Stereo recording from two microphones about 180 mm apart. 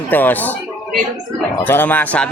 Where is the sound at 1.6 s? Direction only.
10° left (ahead or behind).